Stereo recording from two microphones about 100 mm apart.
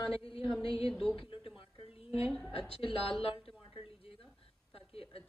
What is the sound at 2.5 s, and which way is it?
Speech, 70° left (ahead or behind).